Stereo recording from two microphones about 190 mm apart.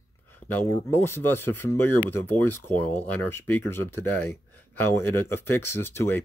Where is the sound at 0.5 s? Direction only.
10° left (ahead or behind).